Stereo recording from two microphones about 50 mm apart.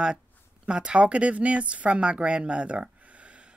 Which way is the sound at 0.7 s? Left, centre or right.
Centre.